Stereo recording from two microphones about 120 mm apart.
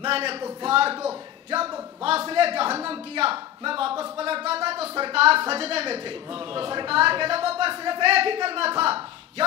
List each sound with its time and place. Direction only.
0.0 s a man's voice: 55° right (ahead or behind)